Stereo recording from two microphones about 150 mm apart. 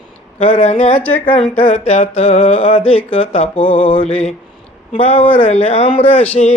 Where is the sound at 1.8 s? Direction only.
40° left (ahead or behind).